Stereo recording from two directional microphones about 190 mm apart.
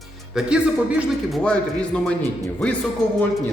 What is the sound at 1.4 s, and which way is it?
Speech, 5° left (ahead or behind).